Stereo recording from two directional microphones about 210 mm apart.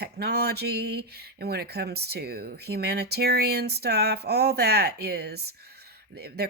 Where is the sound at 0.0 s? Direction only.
50° right (ahead or behind).